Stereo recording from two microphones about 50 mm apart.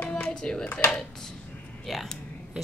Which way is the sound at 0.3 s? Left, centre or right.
Centre.